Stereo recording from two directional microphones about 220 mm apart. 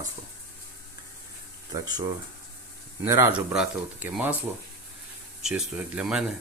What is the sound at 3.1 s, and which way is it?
Speech, 15° right (ahead or behind).